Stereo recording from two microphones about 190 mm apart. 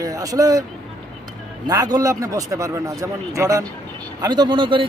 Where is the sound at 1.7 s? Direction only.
20° right (ahead or behind).